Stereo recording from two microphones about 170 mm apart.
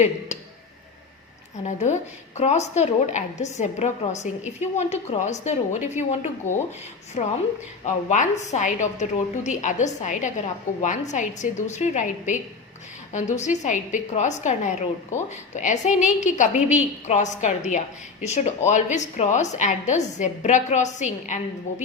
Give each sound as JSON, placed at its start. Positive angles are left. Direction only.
{"t": 1.6, "sound": "a woman's voice", "side_deg": 45}
{"t": 7.2, "sound": "a woman's voice", "side_deg": 40}